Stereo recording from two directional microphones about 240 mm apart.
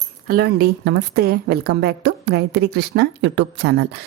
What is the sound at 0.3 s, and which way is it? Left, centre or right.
A woman's voice, right.